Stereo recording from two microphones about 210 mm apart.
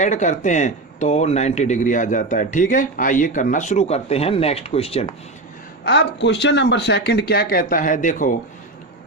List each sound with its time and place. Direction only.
0.0 s speech: 35° left (ahead or behind)
5.8 s speech: 55° left (ahead or behind)